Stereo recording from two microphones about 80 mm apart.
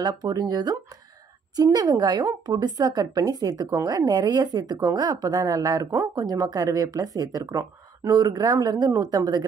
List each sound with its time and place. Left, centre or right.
0.0 s speech: right